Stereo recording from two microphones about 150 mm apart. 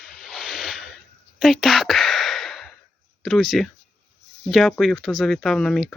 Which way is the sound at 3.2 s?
Centre (ahead or behind).